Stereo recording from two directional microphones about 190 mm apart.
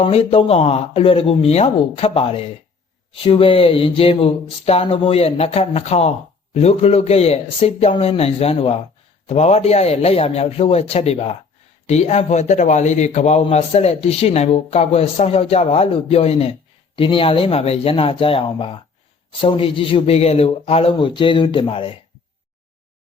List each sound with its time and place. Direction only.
0.0 s a man's voice: 30° left (ahead or behind)